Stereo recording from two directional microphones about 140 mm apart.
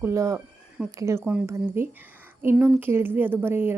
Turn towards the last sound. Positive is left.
turn(degrees=-15)  # may be behind; listen again after turning